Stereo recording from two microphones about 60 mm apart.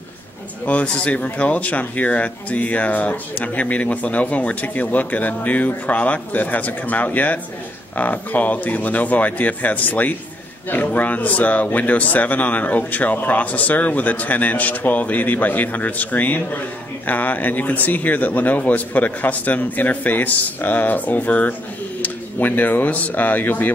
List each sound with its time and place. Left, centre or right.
0.7 s speech: left